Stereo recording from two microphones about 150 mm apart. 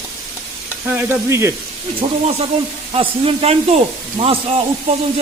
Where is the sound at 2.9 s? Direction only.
40° right (ahead or behind).